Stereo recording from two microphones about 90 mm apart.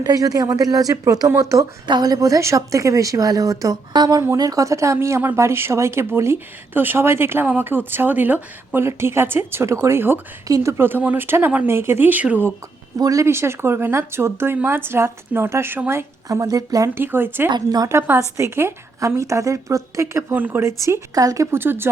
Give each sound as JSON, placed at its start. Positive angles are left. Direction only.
{"t": 0.0, "sound": "a woman's voice", "side_deg": -45}
{"t": 1.9, "sound": "a woman's voice", "side_deg": -45}
{"t": 13.0, "sound": "a woman's voice", "side_deg": -40}
{"t": 13.2, "sound": "a woman's voice", "side_deg": -30}
{"t": 16.9, "sound": "speech", "side_deg": -25}
{"t": 17.5, "sound": "speech", "side_deg": -45}
{"t": 18.2, "sound": "a woman's voice", "side_deg": -35}
{"t": 20.3, "sound": "speech", "side_deg": -20}
{"t": 20.7, "sound": "a woman's voice", "side_deg": -35}